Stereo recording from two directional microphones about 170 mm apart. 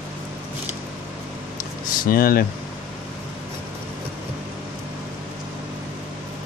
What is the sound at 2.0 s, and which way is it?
Speech, 60° left (ahead or behind).